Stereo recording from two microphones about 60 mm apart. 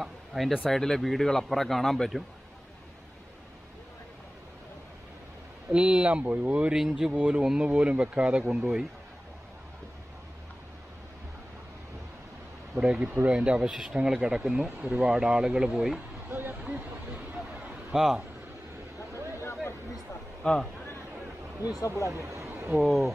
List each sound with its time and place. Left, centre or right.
0.0 s a sound: centre
0.7 s speech: centre
5.7 s speech: centre
6.7 s speech: centre
12.7 s speech: right
16.3 s a sound: right
17.9 s speech: centre
19.1 s vehicle: right
19.4 s a sound: left
20.4 s speech: centre
21.8 s speech: left
22.1 s speech: right
22.5 s a sound: right
22.8 s speech: centre